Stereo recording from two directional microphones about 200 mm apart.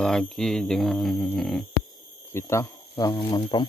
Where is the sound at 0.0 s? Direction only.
Centre (ahead or behind).